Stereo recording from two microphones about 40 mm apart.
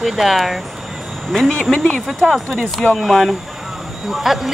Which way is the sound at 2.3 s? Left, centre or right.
Centre.